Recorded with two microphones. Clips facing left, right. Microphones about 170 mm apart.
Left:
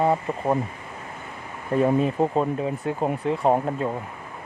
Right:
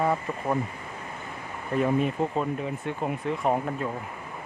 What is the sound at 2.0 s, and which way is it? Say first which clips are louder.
Speech: left 4 dB; 35° left (ahead or behind).